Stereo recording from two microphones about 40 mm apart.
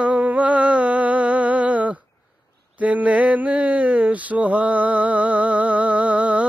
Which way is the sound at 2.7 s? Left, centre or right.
Right.